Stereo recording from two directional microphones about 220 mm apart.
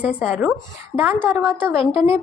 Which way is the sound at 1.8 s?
25° left (ahead or behind).